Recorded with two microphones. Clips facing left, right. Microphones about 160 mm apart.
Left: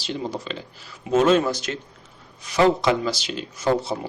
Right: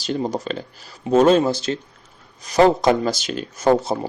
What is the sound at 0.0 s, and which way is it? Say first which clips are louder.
Speech: right 5 dB; 45° right (ahead or behind).